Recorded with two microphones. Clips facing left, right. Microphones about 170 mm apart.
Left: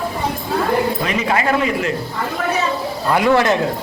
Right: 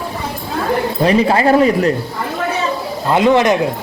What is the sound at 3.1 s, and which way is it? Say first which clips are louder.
Speech: right 3 dB; 20° right (ahead or behind).